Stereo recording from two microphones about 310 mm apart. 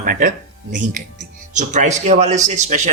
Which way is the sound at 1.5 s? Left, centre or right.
Right.